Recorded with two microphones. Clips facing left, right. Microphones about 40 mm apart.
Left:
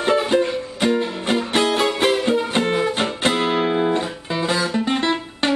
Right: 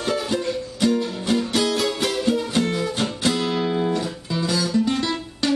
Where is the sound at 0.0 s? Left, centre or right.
Left.